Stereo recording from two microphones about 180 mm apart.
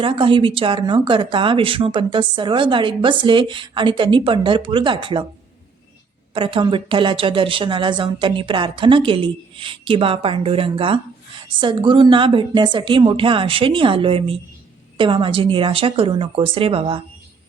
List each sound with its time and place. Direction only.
0.0 s speech: 30° right (ahead or behind)
6.3 s speech: 30° right (ahead or behind)